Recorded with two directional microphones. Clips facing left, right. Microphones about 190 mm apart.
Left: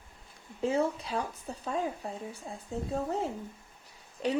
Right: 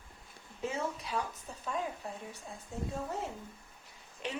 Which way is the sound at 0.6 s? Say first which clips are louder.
Left 8 dB; 30° left (ahead or behind).